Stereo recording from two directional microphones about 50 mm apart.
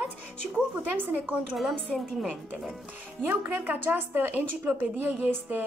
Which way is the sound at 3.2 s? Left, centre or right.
Right.